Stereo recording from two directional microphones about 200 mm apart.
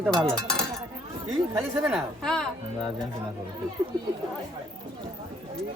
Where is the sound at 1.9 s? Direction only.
5° left (ahead or behind).